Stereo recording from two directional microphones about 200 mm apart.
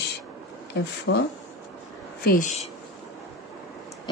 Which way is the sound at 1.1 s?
60° left (ahead or behind).